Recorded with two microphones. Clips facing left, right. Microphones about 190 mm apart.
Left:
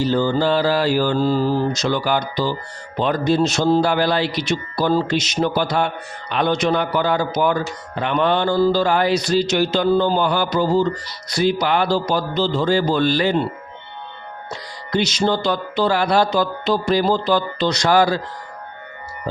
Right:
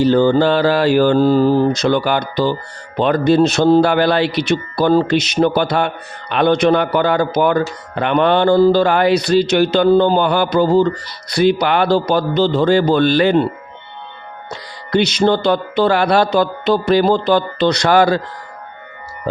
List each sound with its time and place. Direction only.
0.0 s speech: 60° right (ahead or behind)
14.5 s speech: 60° right (ahead or behind)